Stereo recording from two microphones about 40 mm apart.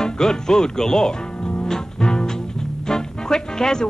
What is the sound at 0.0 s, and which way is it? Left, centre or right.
Speech, centre.